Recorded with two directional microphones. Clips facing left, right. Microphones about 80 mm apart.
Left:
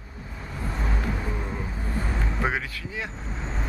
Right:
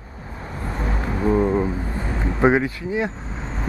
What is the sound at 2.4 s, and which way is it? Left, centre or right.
Speech, right.